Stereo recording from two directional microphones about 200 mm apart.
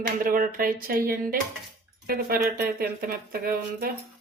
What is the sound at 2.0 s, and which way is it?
Speech, 45° right (ahead or behind).